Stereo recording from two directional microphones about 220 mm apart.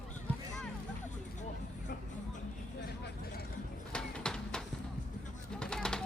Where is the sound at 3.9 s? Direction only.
5° left (ahead or behind).